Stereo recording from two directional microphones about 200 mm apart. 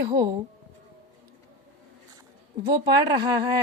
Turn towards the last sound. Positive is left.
turn(degrees=-20)  # may be behind; listen again after turning